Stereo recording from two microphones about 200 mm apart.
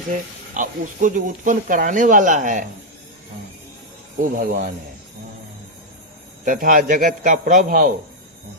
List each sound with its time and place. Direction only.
0.1 s speech: 40° right (ahead or behind)
4.2 s speech: 40° right (ahead or behind)
6.4 s speech: 40° right (ahead or behind)